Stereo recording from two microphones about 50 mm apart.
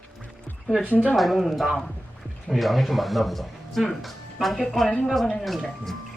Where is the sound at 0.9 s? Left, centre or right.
Left.